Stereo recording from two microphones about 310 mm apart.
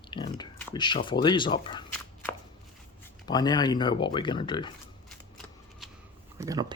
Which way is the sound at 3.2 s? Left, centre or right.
Centre.